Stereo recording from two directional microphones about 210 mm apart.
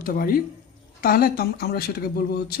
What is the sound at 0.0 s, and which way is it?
Speech, 45° left (ahead or behind).